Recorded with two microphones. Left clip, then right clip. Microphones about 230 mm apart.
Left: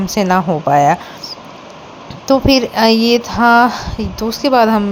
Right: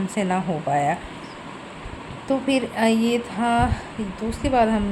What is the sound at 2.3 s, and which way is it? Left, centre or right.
A woman's voice, left.